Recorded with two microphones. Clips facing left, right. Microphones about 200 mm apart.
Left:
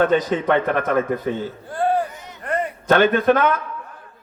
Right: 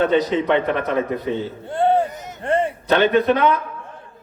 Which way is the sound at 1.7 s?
25° right (ahead or behind).